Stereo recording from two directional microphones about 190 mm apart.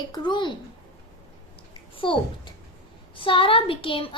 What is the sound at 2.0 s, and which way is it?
A child's voice, 25° left (ahead or behind).